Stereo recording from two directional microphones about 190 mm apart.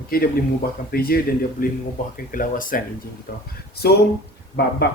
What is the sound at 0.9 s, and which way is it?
Speech, 50° left (ahead or behind).